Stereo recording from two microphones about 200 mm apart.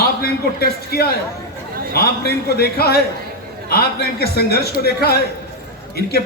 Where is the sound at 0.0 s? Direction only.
50° left (ahead or behind).